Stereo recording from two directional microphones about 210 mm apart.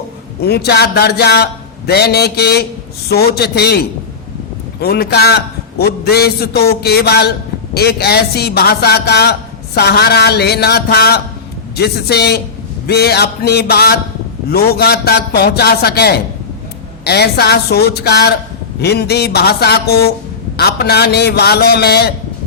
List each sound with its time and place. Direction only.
0.4 s a man's voice: 50° left (ahead or behind)